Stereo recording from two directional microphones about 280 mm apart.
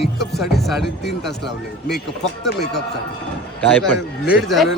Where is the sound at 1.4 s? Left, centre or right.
Left.